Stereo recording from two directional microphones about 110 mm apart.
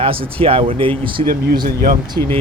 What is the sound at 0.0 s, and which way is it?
Speech, 55° right (ahead or behind).